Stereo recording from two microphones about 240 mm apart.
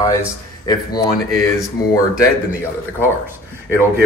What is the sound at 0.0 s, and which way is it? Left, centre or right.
Speech, centre.